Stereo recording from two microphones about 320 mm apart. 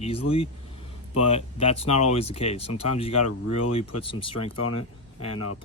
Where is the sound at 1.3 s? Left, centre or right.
Centre.